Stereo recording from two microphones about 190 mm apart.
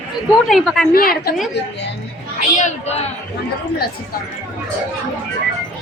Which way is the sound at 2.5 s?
35° left (ahead or behind).